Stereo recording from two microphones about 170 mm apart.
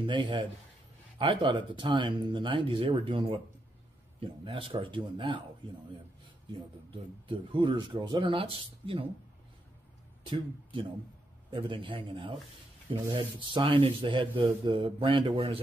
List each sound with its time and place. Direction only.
0.0 s speech: 30° right (ahead or behind)
6.9 s speech: 30° right (ahead or behind)
10.3 s speech: 30° right (ahead or behind)